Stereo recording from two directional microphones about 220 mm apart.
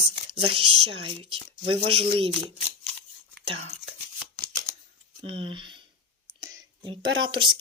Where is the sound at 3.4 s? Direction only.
25° right (ahead or behind).